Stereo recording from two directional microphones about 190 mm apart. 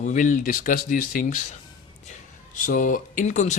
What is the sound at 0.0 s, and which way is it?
Speech, 40° left (ahead or behind).